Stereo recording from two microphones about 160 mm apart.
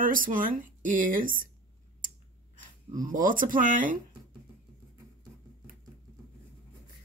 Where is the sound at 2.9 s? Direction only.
55° right (ahead or behind).